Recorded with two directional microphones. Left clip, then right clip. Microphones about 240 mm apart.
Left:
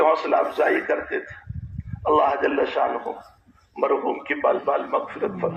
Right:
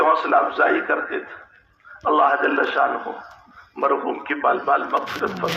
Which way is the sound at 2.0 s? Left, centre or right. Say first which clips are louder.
Right 2 dB; right.